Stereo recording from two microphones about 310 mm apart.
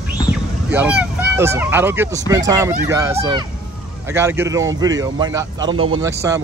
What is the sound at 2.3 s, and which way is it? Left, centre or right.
Speech, centre.